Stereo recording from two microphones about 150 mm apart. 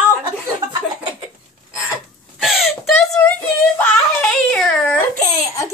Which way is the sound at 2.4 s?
Centre (ahead or behind).